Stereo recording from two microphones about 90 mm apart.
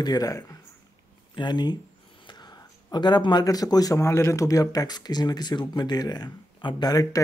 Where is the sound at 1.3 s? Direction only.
55° left (ahead or behind).